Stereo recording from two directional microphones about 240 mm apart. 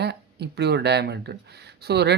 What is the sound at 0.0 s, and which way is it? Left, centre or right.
Speech, right.